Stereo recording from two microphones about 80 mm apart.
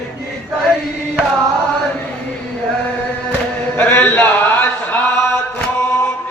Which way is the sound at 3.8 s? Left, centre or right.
Left.